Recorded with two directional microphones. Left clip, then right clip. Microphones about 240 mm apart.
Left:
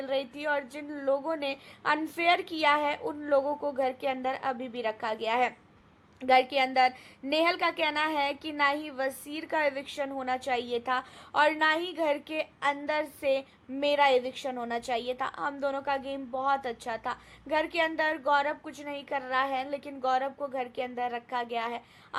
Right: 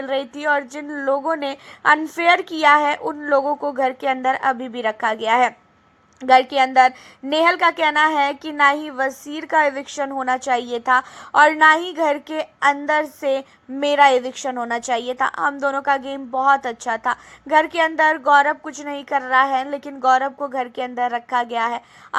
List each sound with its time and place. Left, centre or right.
0.0 s a woman's voice: centre